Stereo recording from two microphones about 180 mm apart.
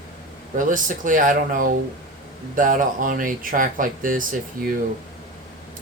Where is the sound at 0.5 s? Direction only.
45° right (ahead or behind).